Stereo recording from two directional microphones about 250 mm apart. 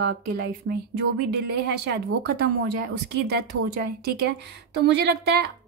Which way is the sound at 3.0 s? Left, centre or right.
Right.